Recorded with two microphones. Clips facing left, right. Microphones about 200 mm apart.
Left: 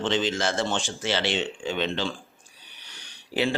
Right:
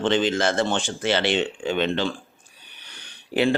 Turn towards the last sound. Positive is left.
turn(degrees=-55)  # may be behind; listen again after turning